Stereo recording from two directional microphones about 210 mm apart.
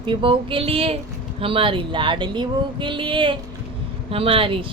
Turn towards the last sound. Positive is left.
turn(degrees=-25)  # may be behind; listen again after turning